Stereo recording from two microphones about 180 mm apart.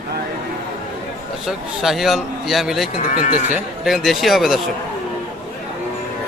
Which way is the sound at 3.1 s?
50° left (ahead or behind).